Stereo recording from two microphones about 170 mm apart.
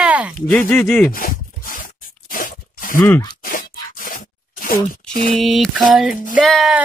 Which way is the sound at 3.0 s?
15° left (ahead or behind).